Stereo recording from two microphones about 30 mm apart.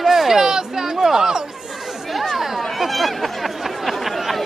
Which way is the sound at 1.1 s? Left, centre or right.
Centre.